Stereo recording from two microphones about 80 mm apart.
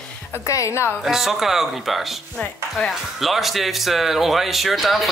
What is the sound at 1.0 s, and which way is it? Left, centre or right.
Speech, centre.